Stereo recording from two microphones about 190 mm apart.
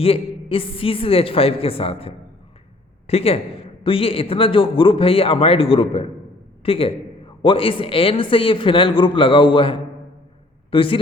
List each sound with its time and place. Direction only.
0.0 s a man's voice: 30° left (ahead or behind)